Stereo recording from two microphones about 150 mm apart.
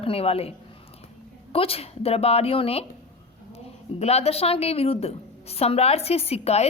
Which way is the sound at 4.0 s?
45° left (ahead or behind).